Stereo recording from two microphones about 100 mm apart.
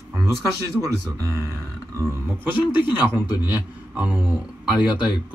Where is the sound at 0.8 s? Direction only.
30° right (ahead or behind).